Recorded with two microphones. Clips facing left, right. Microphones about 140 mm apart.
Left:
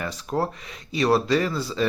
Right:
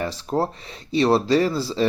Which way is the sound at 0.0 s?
30° right (ahead or behind).